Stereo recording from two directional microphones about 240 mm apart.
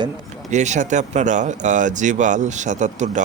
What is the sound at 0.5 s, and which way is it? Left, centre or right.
Speech, right.